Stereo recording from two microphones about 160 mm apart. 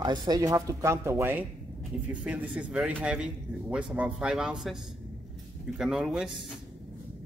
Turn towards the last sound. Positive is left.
turn(degrees=-5)  # may be behind; listen again after turning